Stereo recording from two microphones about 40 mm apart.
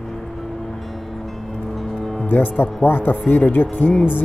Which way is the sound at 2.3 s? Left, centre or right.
Left.